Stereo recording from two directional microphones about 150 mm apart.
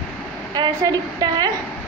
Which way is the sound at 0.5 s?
25° right (ahead or behind).